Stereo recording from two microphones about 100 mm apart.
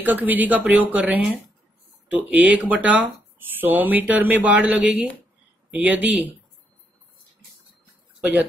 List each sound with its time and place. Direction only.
0.0 s speech: 15° right (ahead or behind)
8.2 s speech: 15° right (ahead or behind)